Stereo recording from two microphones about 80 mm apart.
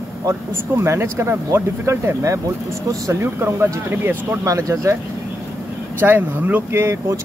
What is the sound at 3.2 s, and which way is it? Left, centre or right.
Speech, right.